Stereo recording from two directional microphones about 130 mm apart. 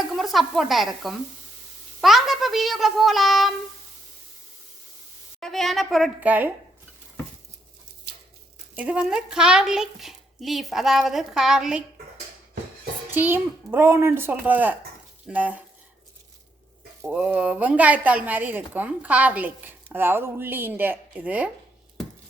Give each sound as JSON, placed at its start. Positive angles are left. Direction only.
{"t": 0.1, "sound": "sizzle", "side_deg": 0}
{"t": 2.0, "sound": "a woman's voice", "side_deg": 0}
{"t": 5.4, "sound": "a woman's voice", "side_deg": 5}
{"t": 6.1, "sound": "a woman's voice", "side_deg": -10}
{"t": 8.7, "sound": "a woman's voice", "side_deg": -10}
{"t": 13.1, "sound": "a woman's voice", "side_deg": -15}
{"t": 17.0, "sound": "a woman's voice", "side_deg": -10}